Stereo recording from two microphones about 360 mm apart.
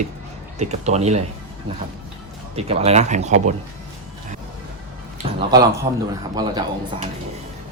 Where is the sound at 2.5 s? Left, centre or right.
Centre.